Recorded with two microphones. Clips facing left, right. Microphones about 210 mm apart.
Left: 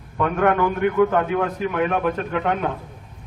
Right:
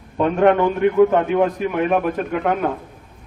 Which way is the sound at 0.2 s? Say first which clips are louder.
Right 4 dB; 25° right (ahead or behind).